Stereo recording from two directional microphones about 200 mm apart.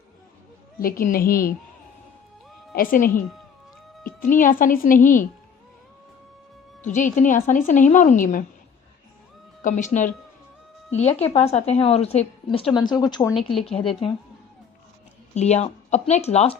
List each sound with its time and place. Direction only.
0.8 s speech: 45° left (ahead or behind)
2.7 s speech: 45° left (ahead or behind)
6.8 s speech: 40° left (ahead or behind)
9.6 s a woman's voice: 40° left (ahead or behind)
15.4 s speech: 35° left (ahead or behind)